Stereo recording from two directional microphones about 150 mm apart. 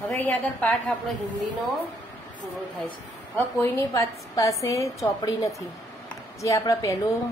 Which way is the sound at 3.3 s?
15° left (ahead or behind).